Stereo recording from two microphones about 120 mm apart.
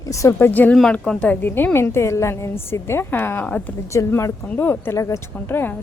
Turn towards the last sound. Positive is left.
turn(degrees=20)  # may be behind; listen again after turning